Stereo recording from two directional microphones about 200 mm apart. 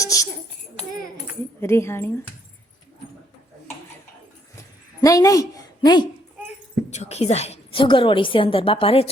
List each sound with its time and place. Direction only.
0.0 s a sound: 15° left (ahead or behind)
1.6 s speech: 10° left (ahead or behind)
4.9 s a woman's voice: 15° left (ahead or behind)
6.9 s a woman's voice: 35° left (ahead or behind)